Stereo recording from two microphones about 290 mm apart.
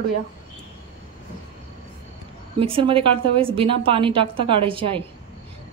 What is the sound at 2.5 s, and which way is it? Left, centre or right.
A woman's voice, centre.